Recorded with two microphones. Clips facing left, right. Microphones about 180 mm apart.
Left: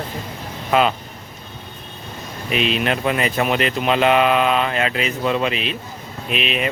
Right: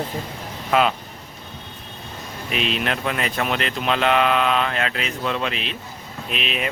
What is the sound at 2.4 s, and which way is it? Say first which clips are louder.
A man's voice: left 4 dB; centre (ahead or behind).